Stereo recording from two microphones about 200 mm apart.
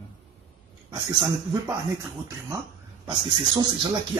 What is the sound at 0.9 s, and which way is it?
Speech, 15° right (ahead or behind).